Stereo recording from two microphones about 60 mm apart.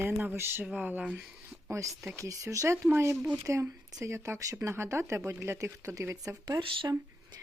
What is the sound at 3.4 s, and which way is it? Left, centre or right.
Speech, right.